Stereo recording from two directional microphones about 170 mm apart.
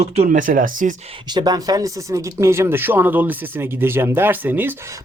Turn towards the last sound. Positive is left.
turn(degrees=-10)  # may be behind; listen again after turning